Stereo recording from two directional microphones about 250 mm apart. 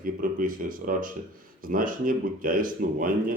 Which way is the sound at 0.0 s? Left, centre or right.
Right.